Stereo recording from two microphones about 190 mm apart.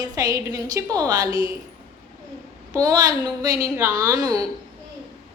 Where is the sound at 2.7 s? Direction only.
20° right (ahead or behind).